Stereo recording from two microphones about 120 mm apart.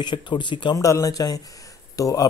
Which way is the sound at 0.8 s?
30° left (ahead or behind).